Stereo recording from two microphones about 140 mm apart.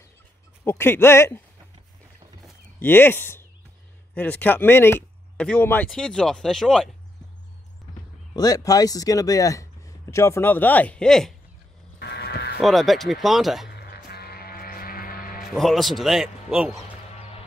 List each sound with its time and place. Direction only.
0.7 s speech: 15° left (ahead or behind)
2.8 s a man's voice: 15° left (ahead or behind)
8.3 s speech: 25° left (ahead or behind); by 11.3 s 5° left (ahead or behind)
12.5 s a man's voice: centre (ahead or behind)
14.0 s vehicle: 90° left
15.5 s a man's voice: centre (ahead or behind)